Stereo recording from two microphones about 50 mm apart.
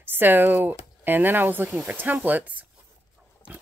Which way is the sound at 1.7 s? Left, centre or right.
Right.